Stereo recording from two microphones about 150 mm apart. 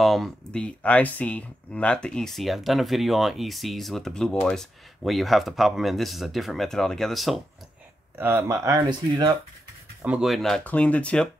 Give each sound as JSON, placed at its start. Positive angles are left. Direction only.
{"t": 0.0, "sound": "speech", "side_deg": 0}
{"t": 8.2, "sound": "speech", "side_deg": -15}
{"t": 10.0, "sound": "speech", "side_deg": -5}